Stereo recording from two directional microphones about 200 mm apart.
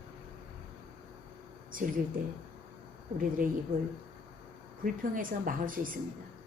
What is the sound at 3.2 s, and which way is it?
Speech, 45° right (ahead or behind).